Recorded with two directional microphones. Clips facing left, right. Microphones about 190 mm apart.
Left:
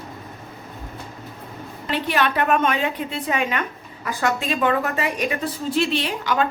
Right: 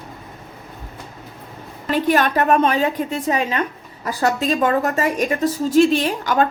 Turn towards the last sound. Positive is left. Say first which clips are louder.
# right 4 dB
turn(degrees=-45)  # may be behind; listen again after turning